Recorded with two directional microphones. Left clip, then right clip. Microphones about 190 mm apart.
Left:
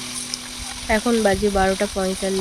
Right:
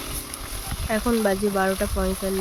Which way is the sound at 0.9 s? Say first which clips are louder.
Left 4 dB; 15° left (ahead or behind).